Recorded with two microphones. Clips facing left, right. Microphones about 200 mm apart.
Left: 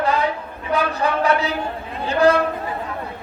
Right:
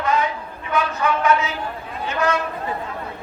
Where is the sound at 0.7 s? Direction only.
35° left (ahead or behind).